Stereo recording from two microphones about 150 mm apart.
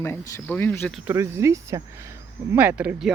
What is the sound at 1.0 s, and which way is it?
Speech, 20° right (ahead or behind).